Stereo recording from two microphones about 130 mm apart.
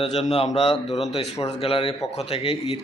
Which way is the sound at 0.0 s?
55° left (ahead or behind).